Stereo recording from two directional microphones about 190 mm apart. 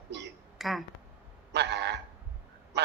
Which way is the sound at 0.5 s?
Centre (ahead or behind).